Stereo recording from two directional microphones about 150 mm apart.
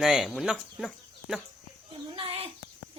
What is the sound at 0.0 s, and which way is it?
Speech, centre (ahead or behind).